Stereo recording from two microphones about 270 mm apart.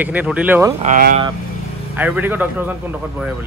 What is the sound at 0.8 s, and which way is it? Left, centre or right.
Speech, right.